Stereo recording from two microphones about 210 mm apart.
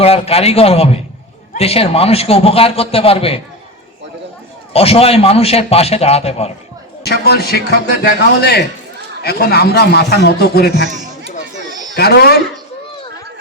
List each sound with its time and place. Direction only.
0.0 s a man's voice: 30° left (ahead or behind)
4.7 s a man's voice: 30° left (ahead or behind)
7.0 s a man's voice: 50° left (ahead or behind)
11.9 s a man's voice: 50° left (ahead or behind)